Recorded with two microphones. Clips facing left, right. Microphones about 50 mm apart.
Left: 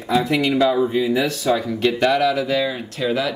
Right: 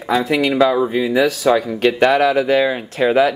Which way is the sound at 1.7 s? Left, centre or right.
Right.